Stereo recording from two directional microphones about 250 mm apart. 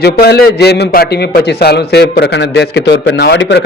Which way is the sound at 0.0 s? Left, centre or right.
Left.